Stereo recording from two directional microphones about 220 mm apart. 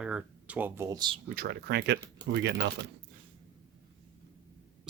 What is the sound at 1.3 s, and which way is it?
Speech, 45° right (ahead or behind).